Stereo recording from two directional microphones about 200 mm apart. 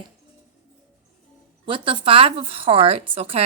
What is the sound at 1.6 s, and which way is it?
A woman's voice, 25° right (ahead or behind).